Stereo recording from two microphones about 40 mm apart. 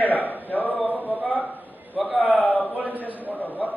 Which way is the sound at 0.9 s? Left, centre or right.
Right.